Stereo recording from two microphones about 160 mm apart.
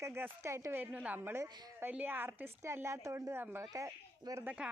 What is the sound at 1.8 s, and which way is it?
A woman's voice, 10° right (ahead or behind).